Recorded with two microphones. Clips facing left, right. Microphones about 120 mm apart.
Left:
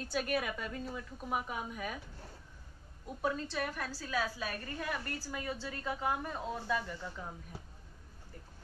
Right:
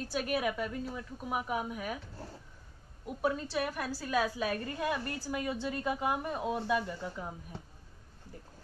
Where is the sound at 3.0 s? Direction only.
10° right (ahead or behind).